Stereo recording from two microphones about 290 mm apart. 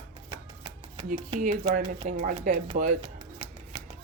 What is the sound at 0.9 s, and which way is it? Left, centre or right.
Speech, right.